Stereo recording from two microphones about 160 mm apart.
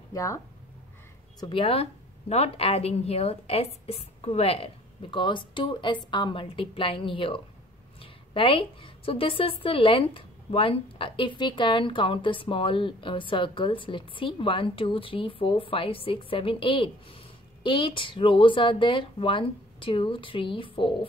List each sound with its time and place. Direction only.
0.1 s speech: 20° left (ahead or behind)
1.4 s a woman's voice: 35° left (ahead or behind)